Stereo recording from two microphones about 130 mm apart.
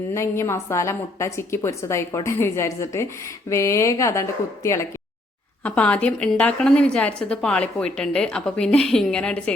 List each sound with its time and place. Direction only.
0.1 s a woman's voice: 20° left (ahead or behind)
5.6 s a woman's voice: 10° left (ahead or behind)